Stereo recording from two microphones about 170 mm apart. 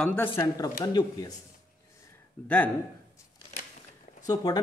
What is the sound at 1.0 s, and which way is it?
Speech, 25° left (ahead or behind).